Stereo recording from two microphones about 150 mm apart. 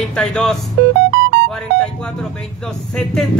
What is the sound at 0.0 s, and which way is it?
Speech, 5° left (ahead or behind).